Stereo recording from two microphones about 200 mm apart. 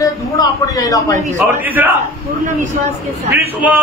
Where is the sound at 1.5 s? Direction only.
10° right (ahead or behind).